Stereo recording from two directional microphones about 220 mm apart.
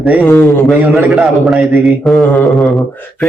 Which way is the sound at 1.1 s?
Centre (ahead or behind).